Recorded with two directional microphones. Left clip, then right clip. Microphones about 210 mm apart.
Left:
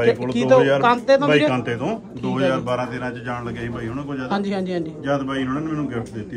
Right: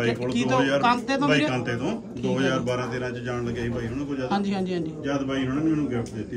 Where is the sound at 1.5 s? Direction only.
25° left (ahead or behind).